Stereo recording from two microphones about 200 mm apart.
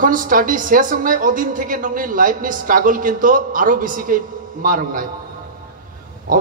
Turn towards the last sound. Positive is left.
turn(degrees=-40)  # may be behind; listen again after turning